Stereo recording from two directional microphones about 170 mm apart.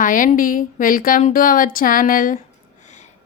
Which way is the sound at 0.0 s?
50° left (ahead or behind).